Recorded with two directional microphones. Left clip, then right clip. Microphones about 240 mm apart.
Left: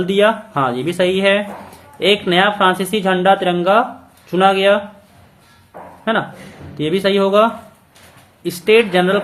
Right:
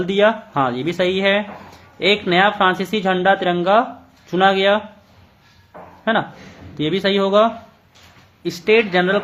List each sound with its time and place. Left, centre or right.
0.1 s speech: centre
1.7 s a sound: centre
2.2 s speech: centre
6.1 s speech: right